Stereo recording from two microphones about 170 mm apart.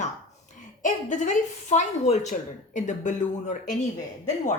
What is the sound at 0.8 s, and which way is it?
Speech, 50° left (ahead or behind).